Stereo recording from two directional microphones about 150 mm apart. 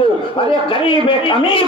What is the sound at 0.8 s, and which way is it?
Speech, 35° left (ahead or behind).